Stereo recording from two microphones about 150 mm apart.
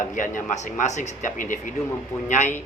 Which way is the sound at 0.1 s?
60° left (ahead or behind).